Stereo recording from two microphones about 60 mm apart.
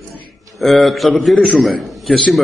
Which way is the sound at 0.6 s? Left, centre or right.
Centre.